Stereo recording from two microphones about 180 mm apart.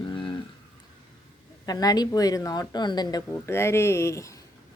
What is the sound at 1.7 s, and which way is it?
Speech, 20° left (ahead or behind).